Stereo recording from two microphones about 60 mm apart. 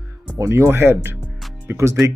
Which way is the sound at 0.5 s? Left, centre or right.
Right.